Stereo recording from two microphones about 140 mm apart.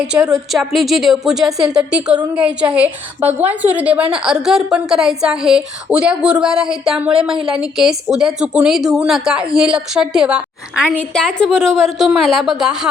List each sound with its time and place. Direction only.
0.1 s speech: 20° right (ahead or behind)
0.5 s a woman's voice: centre (ahead or behind)
10.9 s speech: 5° left (ahead or behind)